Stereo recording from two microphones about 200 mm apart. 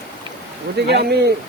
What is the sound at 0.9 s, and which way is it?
Speech, 55° right (ahead or behind).